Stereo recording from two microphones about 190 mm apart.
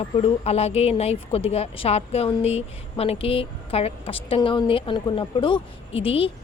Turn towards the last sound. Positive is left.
turn(degrees=30)  # may be behind; listen again after turning